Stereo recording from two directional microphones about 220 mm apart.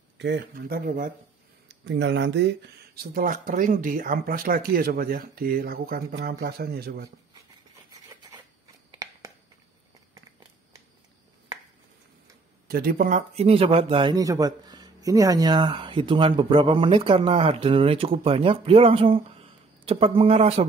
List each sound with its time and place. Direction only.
0.2 s speech: 50° right (ahead or behind)
1.7 s speech: 50° right (ahead or behind)
8.9 s a sound: 15° right (ahead or behind)
12.6 s speech: 45° right (ahead or behind); by 20.6 s 25° right (ahead or behind)